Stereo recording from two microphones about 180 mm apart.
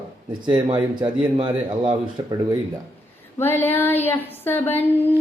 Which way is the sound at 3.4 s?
10° left (ahead or behind).